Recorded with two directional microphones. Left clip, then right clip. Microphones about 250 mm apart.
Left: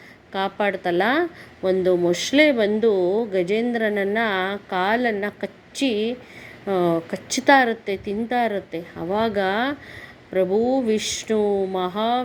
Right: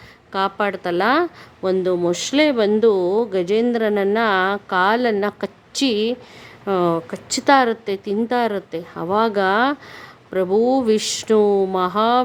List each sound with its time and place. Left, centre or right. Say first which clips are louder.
0.3 s a woman's voice: right 2 dB; centre
6.7 s a woman's voice: right 2 dB; centre